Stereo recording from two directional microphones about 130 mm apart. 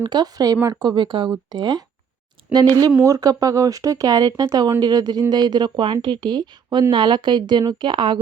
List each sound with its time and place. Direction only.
0.0 s speech: 35° right (ahead or behind)
3.0 s speech: 25° right (ahead or behind)